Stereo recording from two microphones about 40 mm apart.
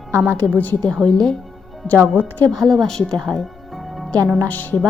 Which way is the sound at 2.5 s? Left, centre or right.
Centre.